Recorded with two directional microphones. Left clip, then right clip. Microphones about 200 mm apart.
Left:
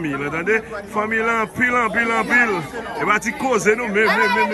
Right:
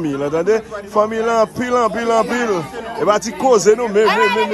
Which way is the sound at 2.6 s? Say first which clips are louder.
Right 3 dB; 5° right (ahead or behind).